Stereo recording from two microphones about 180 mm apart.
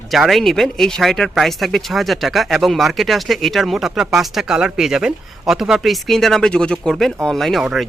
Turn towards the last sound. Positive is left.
turn(degrees=0)  # may be behind; listen again after turning